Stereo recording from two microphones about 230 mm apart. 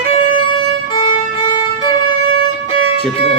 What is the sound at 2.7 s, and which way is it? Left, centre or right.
Music, left.